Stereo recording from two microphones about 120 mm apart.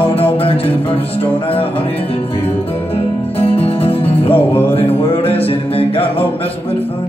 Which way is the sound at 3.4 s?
55° left (ahead or behind).